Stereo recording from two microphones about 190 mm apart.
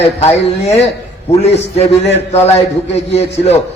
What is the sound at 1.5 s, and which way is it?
Speech, 35° left (ahead or behind).